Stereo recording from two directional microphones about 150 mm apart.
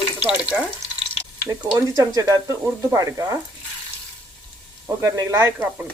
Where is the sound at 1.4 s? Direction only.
20° right (ahead or behind).